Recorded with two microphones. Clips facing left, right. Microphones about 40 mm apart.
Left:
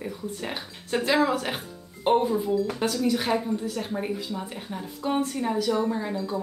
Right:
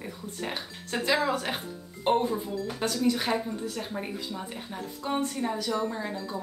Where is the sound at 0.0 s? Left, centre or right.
Centre.